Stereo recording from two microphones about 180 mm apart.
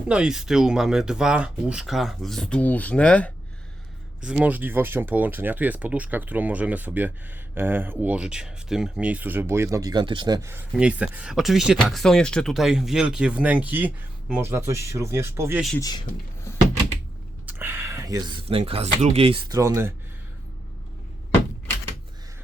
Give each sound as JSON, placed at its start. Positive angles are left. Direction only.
{"t": 0.1, "sound": "speech", "side_deg": -5}
{"t": 4.2, "sound": "speech", "side_deg": -5}
{"t": 15.8, "sound": "speech", "side_deg": 20}
{"t": 17.4, "sound": "speech", "side_deg": -10}
{"t": 19.5, "sound": "speech", "side_deg": -15}